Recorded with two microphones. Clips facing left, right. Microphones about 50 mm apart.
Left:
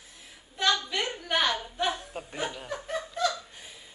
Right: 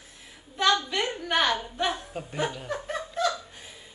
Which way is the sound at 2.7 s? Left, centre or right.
Centre.